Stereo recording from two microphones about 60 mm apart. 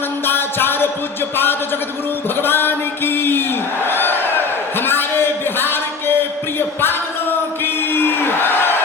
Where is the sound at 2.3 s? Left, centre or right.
Left.